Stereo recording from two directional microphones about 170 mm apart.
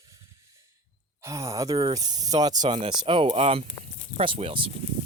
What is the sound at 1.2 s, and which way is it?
Speech, 15° right (ahead or behind).